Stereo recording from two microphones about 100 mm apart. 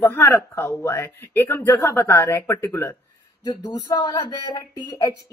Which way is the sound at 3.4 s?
40° left (ahead or behind).